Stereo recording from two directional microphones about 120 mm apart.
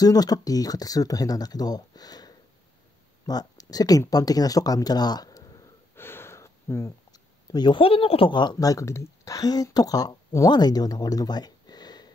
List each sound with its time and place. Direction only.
0.0 s speech: 30° left (ahead or behind)
5.9 s a sound: 20° left (ahead or behind)
7.5 s speech: 40° left (ahead or behind)